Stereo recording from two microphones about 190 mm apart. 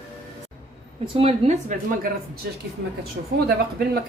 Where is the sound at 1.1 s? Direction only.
35° right (ahead or behind).